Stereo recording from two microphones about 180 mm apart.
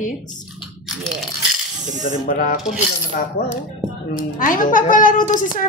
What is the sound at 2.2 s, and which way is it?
Speech, 45° left (ahead or behind).